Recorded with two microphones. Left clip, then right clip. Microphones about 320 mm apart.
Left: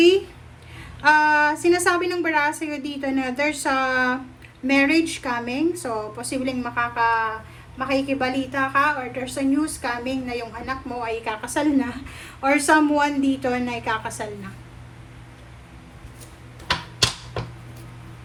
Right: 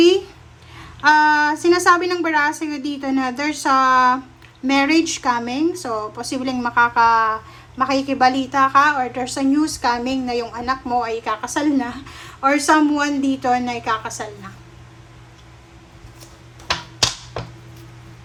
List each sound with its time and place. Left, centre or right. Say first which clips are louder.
1.0 s a woman's voice: right 3 dB; centre